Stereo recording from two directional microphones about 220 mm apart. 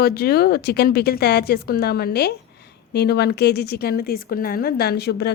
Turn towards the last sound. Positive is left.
turn(degrees=50)  # may be behind; listen again after turning